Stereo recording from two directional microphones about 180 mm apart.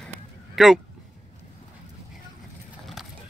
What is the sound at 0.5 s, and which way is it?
Speech, centre (ahead or behind).